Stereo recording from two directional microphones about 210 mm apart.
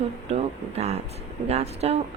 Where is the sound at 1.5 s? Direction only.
30° right (ahead or behind).